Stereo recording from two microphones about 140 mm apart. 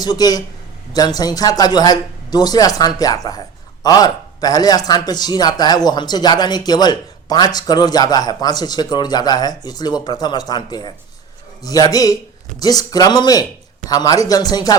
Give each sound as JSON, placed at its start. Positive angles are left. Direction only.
{"t": 0.0, "sound": "speech", "side_deg": 30}